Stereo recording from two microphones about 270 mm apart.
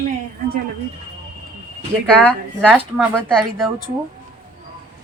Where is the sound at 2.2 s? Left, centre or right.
Centre.